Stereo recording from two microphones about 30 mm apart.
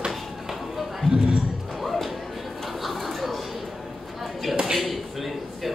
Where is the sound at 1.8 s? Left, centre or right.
Centre.